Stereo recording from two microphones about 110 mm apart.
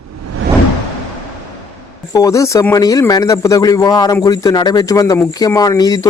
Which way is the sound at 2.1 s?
30° left (ahead or behind).